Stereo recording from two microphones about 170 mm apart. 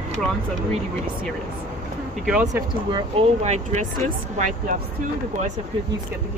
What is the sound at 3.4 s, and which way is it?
Speech, 40° right (ahead or behind).